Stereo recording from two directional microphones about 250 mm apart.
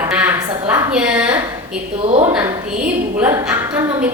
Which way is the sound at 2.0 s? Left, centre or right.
Right.